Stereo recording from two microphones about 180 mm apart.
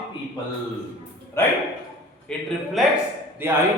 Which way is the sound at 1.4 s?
15° left (ahead or behind).